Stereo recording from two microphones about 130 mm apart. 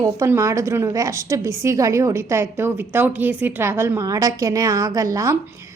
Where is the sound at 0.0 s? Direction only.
25° right (ahead or behind).